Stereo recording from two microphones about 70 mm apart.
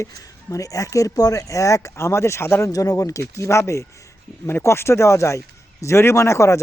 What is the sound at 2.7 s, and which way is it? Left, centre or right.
Speech, left.